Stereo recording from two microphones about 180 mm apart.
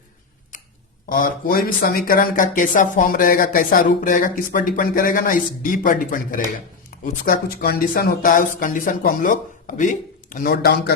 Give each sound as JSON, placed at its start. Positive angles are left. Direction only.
{"t": 1.1, "sound": "speech", "side_deg": 50}